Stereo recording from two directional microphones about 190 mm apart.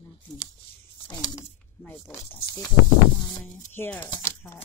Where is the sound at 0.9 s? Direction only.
20° left (ahead or behind).